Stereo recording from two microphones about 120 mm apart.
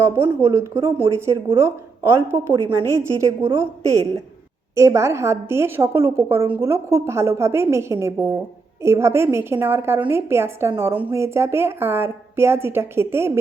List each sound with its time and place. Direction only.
0.0 s a woman's voice: 20° right (ahead or behind)